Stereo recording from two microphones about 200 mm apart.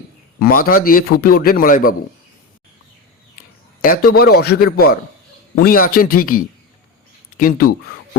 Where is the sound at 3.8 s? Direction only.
45° left (ahead or behind).